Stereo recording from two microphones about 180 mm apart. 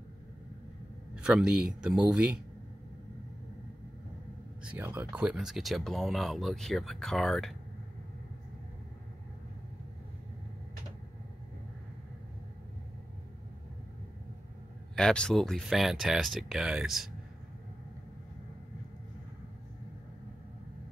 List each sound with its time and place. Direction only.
1.2 s speech: 5° right (ahead or behind)
4.6 s speech: 10° right (ahead or behind)
15.0 s speech: 5° left (ahead or behind)